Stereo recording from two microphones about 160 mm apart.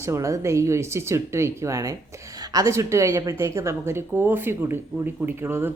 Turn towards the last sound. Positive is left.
turn(degrees=-15)  # may be behind; listen again after turning